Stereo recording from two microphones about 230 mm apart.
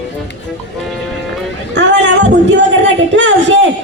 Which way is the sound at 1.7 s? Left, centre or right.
Right.